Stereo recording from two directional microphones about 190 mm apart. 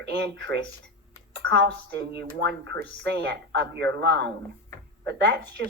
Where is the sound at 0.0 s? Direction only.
65° right (ahead or behind).